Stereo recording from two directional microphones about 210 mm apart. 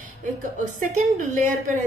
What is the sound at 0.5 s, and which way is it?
Speech, 35° right (ahead or behind).